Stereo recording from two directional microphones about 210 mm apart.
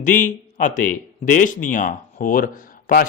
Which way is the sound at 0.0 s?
40° left (ahead or behind).